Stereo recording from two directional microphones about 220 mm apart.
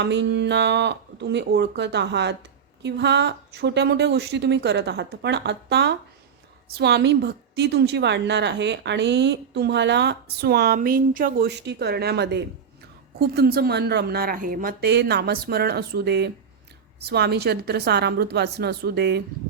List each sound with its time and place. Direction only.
0.0 s a woman's voice: 50° right (ahead or behind)